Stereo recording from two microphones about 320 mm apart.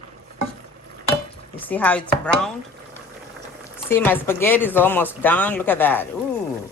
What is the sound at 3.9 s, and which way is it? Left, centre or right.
Speech, centre.